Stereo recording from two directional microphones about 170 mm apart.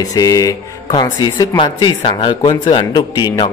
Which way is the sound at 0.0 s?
20° left (ahead or behind).